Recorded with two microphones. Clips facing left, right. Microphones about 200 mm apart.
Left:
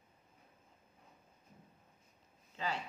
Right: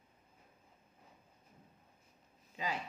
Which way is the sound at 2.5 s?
15° right (ahead or behind).